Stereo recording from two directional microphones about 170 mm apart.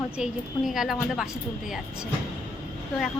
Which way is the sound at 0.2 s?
Centre (ahead or behind).